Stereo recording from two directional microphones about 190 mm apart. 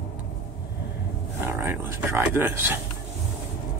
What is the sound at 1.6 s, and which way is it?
Speech, 10° right (ahead or behind).